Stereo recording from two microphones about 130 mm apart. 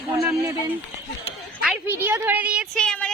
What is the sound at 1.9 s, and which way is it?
Speech, 15° right (ahead or behind).